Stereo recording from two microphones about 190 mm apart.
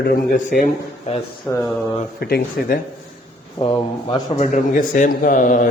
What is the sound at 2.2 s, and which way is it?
Speech, 55° left (ahead or behind).